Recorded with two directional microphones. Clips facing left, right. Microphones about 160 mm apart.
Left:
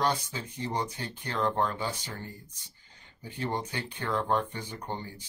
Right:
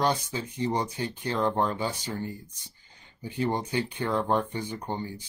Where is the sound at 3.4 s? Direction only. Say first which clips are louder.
Right 5 dB; 15° right (ahead or behind).